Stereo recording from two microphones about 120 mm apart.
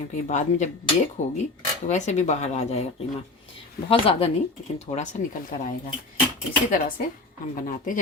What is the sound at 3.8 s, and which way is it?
Speech, 50° left (ahead or behind).